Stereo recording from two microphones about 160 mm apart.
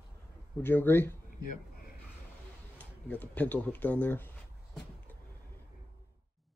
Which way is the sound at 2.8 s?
10° left (ahead or behind).